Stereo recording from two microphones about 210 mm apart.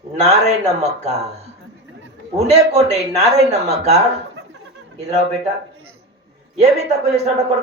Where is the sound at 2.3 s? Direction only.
30° right (ahead or behind).